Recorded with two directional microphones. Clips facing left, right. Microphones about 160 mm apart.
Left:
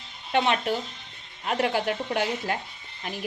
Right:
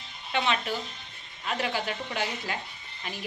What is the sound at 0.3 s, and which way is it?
A woman's voice, 55° left (ahead or behind).